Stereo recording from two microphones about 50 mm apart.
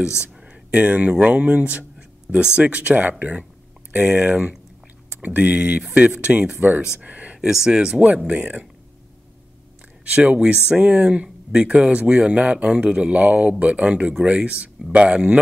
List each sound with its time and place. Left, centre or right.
0.5 s a sound: right
1.2 s speech: right
7.3 s speech: centre
8.3 s speech: right
10.0 s speech: right